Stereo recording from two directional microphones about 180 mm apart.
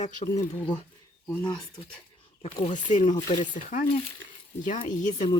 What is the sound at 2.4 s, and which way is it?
Speech, 40° left (ahead or behind).